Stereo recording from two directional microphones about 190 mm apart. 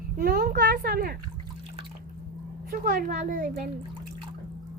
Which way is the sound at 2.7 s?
45° right (ahead or behind).